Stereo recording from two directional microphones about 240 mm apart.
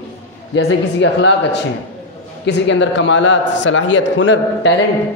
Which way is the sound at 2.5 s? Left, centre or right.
Left.